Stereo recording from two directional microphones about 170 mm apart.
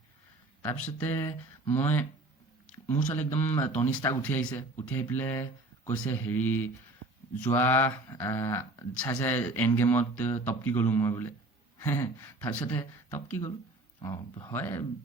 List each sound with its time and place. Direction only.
0.9 s speech: 15° left (ahead or behind)
14.0 s speech: 25° left (ahead or behind)
14.5 s speech: 15° left (ahead or behind)